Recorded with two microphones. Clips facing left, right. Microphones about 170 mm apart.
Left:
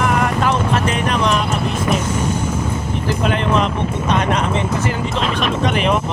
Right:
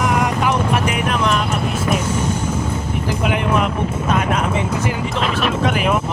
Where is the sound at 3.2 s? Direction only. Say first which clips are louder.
Left 1 dB; 10° right (ahead or behind).